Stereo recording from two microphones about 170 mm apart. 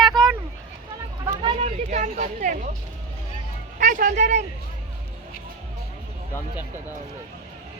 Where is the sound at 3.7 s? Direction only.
50° right (ahead or behind).